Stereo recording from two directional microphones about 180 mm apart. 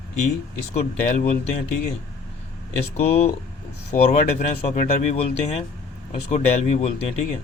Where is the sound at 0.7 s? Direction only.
40° left (ahead or behind).